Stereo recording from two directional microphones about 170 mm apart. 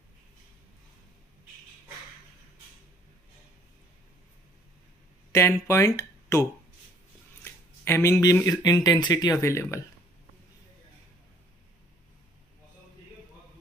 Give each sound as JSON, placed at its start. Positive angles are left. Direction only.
{"t": 5.3, "sound": "speech", "side_deg": 15}
{"t": 7.4, "sound": "a sound", "side_deg": 15}
{"t": 8.6, "sound": "speech", "side_deg": 25}